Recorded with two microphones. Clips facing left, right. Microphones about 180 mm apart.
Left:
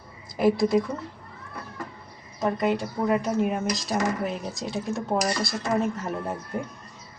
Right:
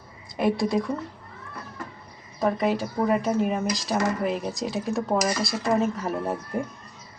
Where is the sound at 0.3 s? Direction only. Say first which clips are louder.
Left 2 dB; centre (ahead or behind).